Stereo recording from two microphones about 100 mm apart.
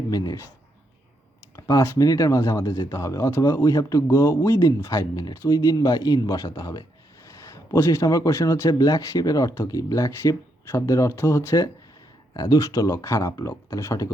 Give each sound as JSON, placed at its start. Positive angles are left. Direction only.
{"t": 0.1, "sound": "speech", "side_deg": 40}
{"t": 1.5, "sound": "speech", "side_deg": 30}